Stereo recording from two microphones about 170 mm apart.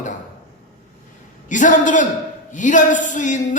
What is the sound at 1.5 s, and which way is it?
A man's voice, 50° left (ahead or behind).